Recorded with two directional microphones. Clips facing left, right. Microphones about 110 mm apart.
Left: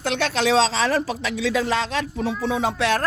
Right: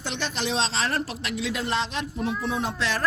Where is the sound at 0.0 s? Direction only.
70° left (ahead or behind); by 0.6 s 85° left.